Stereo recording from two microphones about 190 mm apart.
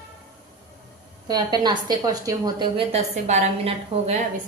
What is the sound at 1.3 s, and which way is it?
A woman's voice, 20° right (ahead or behind).